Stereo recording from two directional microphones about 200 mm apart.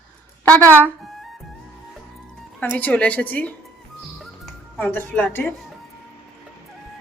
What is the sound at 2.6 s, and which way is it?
Speech, 10° left (ahead or behind).